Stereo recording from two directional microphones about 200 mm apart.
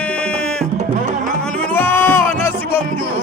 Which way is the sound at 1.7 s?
10° left (ahead or behind).